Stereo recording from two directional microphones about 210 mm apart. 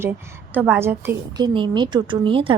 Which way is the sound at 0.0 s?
10° right (ahead or behind).